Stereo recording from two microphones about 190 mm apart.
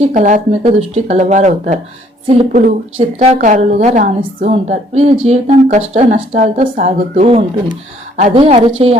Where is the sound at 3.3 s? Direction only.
45° right (ahead or behind).